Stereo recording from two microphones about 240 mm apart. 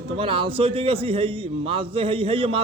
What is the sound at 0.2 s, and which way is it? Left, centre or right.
A man's voice, right.